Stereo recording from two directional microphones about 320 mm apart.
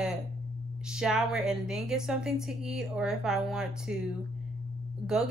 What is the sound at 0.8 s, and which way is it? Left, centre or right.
A woman's voice, centre.